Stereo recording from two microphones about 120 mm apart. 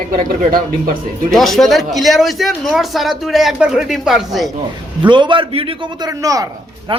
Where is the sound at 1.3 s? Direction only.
Centre (ahead or behind).